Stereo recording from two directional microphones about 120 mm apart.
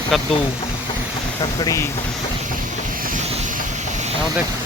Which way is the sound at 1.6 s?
25° left (ahead or behind).